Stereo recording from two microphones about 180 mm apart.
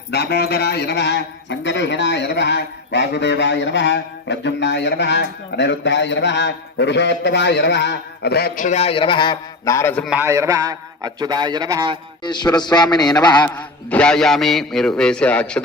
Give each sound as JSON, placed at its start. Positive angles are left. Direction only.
{"t": 0.1, "sound": "a man's voice", "side_deg": 65}
{"t": 8.6, "sound": "a man's voice", "side_deg": 35}
{"t": 10.0, "sound": "a man's voice", "side_deg": -5}
{"t": 10.2, "sound": "speech", "side_deg": -15}
{"t": 12.2, "sound": "a man's voice", "side_deg": 25}
{"t": 13.6, "sound": "a man's voice", "side_deg": 5}